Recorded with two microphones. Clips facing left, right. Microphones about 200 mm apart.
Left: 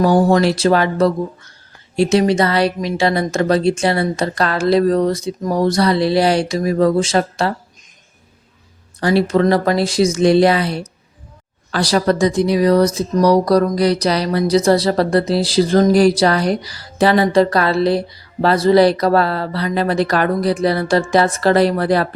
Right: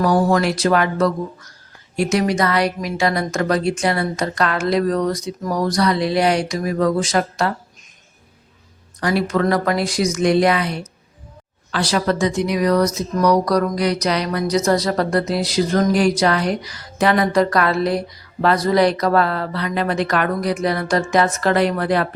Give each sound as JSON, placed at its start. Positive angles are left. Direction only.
{"t": 0.0, "sound": "a woman's voice", "side_deg": 25}
{"t": 9.0, "sound": "a woman's voice", "side_deg": 30}
{"t": 11.7, "sound": "a sound", "side_deg": 35}